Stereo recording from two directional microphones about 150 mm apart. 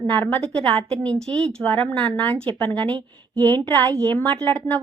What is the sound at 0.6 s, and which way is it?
Speech, 40° right (ahead or behind).